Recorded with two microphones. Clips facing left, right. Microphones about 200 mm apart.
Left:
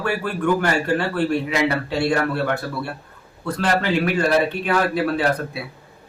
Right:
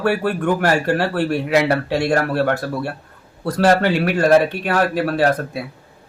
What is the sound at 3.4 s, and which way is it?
Speech, 45° right (ahead or behind).